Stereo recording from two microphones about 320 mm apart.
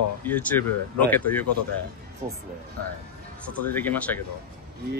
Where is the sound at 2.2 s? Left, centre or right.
Centre.